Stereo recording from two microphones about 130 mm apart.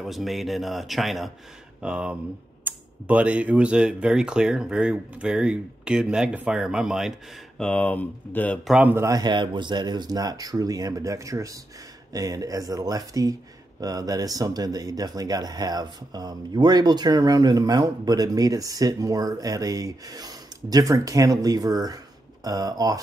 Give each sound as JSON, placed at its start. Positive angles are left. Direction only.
{"t": 0.0, "sound": "a man's voice", "side_deg": 0}
{"t": 7.6, "sound": "speech", "side_deg": 10}
{"t": 8.6, "sound": "speech", "side_deg": -10}
{"t": 8.9, "sound": "speech", "side_deg": -25}
{"t": 9.2, "sound": "speech", "side_deg": -35}